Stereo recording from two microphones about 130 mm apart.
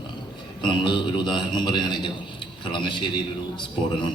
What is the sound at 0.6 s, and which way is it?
A man's voice, 35° left (ahead or behind).